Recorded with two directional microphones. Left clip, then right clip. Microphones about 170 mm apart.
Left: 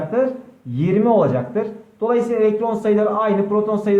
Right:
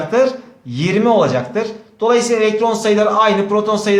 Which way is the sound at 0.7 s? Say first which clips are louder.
Right 3 dB; 10° right (ahead or behind).